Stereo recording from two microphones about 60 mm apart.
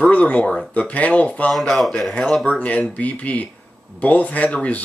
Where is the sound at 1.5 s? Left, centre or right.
Centre.